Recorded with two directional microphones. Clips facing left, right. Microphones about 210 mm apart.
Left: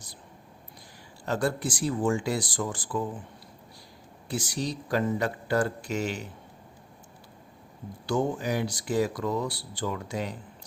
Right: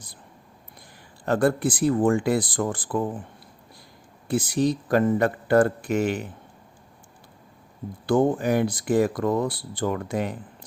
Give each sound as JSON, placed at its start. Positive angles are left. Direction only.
{"t": 1.2, "sound": "speech", "side_deg": -55}
{"t": 4.3, "sound": "speech", "side_deg": -55}
{"t": 8.0, "sound": "speech", "side_deg": -55}